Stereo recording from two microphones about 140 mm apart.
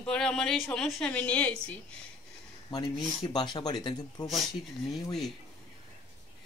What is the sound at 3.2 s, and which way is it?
Speech, 30° left (ahead or behind).